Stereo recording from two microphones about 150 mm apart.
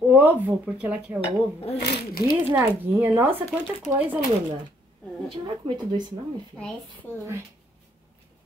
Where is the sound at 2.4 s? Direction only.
15° right (ahead or behind).